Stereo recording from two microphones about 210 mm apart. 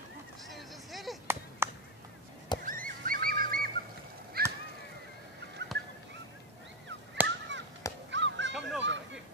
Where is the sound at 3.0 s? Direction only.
45° right (ahead or behind).